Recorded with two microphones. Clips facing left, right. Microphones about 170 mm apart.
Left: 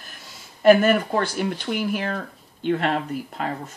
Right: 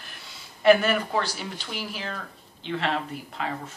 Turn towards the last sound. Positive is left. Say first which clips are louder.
# left 3 dB
turn(degrees=45)  # may be behind; listen again after turning